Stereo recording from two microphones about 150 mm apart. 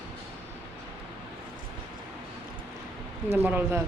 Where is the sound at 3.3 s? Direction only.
15° right (ahead or behind).